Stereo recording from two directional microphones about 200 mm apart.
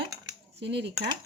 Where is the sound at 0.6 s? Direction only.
60° right (ahead or behind).